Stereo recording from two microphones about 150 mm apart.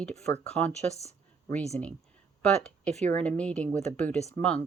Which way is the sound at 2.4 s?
5° left (ahead or behind).